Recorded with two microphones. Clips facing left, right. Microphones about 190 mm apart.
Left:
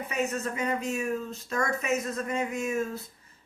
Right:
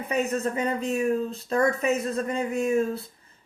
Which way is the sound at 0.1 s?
35° right (ahead or behind).